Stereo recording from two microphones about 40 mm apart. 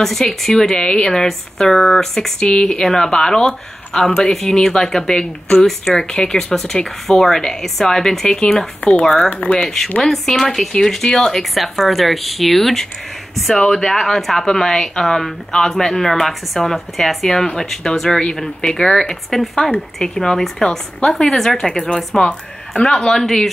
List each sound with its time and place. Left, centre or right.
0.0 s a woman's voice: centre
11.5 s speech: centre
13.6 s a woman's voice: centre